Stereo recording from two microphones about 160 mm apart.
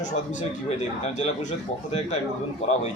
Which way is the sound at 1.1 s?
45° left (ahead or behind).